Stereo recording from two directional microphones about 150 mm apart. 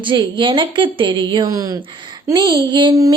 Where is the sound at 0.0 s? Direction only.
30° right (ahead or behind).